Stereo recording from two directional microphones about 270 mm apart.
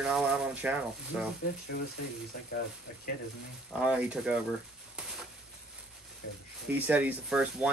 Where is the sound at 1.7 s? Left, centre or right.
Left.